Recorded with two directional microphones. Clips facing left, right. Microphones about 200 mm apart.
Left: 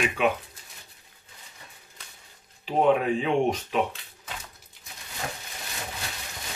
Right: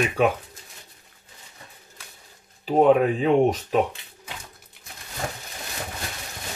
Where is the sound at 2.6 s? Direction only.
40° right (ahead or behind).